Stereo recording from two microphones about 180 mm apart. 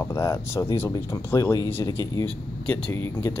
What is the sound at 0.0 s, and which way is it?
Speech, 15° left (ahead or behind).